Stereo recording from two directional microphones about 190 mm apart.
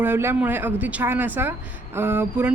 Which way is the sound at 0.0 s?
10° right (ahead or behind).